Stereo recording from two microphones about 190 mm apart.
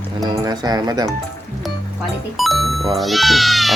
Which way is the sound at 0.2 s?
20° right (ahead or behind).